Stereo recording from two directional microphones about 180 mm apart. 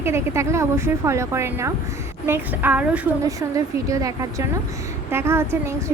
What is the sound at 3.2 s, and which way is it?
A woman's voice, 20° right (ahead or behind).